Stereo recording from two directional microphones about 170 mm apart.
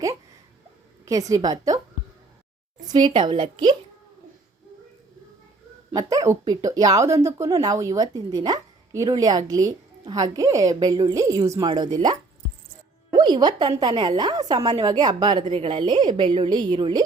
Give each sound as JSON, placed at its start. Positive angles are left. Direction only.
{"t": 1.0, "sound": "a woman's voice", "side_deg": -20}
{"t": 2.8, "sound": "a woman's voice", "side_deg": -25}
{"t": 5.9, "sound": "a woman's voice", "side_deg": -20}
{"t": 13.1, "sound": "a woman's voice", "side_deg": -25}